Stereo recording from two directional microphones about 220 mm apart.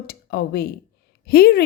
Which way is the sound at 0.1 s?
45° left (ahead or behind).